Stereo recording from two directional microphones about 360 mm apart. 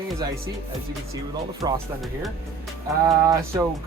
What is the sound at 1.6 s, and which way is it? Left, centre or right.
Speech, centre.